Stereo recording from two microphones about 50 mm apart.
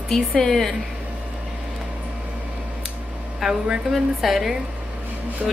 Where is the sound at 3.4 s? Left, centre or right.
Centre.